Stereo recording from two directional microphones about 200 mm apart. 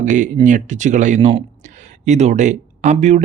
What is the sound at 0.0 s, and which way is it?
Speech, 40° right (ahead or behind).